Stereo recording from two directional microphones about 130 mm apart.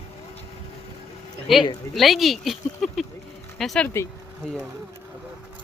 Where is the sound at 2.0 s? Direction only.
Centre (ahead or behind).